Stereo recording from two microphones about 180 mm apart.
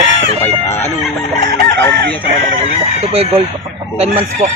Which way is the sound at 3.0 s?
35° right (ahead or behind).